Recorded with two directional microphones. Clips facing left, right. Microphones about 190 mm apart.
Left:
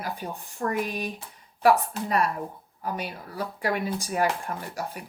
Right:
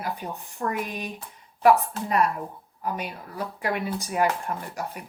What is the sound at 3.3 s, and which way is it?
Speech, 40° left (ahead or behind).